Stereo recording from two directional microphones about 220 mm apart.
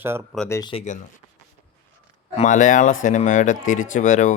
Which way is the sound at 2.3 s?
35° left (ahead or behind).